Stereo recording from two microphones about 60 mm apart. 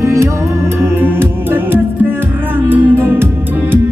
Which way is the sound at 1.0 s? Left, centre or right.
Right.